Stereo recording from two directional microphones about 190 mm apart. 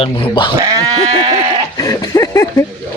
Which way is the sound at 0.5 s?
15° right (ahead or behind).